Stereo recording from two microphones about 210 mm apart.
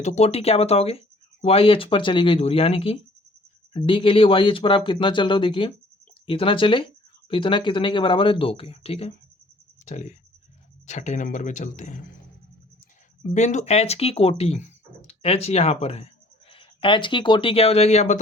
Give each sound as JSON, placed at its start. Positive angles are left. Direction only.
{"t": 0.0, "sound": "speech", "side_deg": 30}
{"t": 13.3, "sound": "speech", "side_deg": 35}